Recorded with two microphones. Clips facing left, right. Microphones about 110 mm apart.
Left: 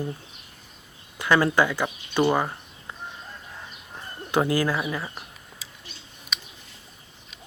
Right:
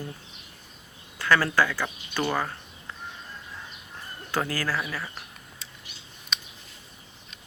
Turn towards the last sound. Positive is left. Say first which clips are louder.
# even
turn(degrees=0)  # may be behind; listen again after turning